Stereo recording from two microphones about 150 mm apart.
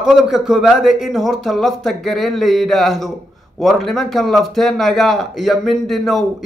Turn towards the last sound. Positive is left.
turn(degrees=0)  # may be behind; listen again after turning